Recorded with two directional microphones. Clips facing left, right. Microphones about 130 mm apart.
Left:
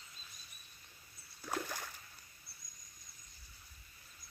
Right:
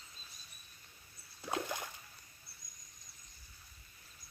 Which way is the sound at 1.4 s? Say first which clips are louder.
Right 2 dB; 20° right (ahead or behind).